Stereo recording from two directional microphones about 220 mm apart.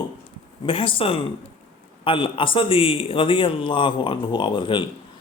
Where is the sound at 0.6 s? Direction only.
25° left (ahead or behind).